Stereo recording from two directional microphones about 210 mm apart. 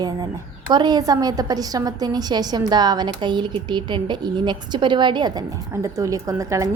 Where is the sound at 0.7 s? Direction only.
20° right (ahead or behind).